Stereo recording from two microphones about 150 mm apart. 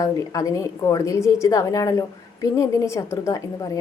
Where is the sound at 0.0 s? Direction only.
20° left (ahead or behind).